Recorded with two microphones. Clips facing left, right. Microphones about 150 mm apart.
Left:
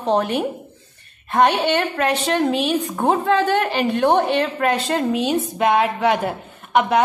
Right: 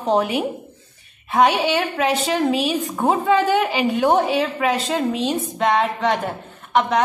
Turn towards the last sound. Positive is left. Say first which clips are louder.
# left 1 dB
turn(degrees=10)  # may be behind; listen again after turning